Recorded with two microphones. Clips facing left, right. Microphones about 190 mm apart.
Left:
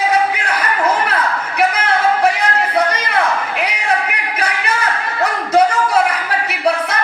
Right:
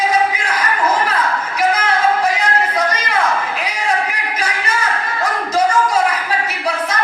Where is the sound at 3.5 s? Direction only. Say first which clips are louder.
Left 1 dB; 65° left (ahead or behind).